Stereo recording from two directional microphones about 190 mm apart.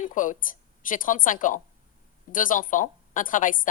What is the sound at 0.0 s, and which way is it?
A woman's voice, 45° left (ahead or behind).